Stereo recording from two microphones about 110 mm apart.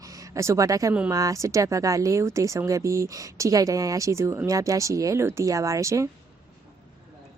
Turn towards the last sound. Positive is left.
turn(degrees=-30)  # may be behind; listen again after turning